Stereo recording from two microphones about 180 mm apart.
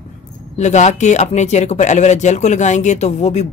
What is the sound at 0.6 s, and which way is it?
Speech, 40° left (ahead or behind).